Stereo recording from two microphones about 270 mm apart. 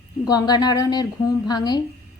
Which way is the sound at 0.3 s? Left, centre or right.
Centre.